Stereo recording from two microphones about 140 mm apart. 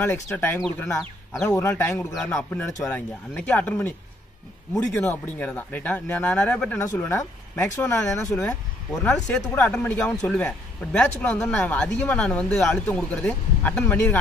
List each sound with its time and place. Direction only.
0.0 s a man's voice: 15° left (ahead or behind)
6.8 s a man's voice: 20° left (ahead or behind)
9.6 s a man's voice: 10° left (ahead or behind)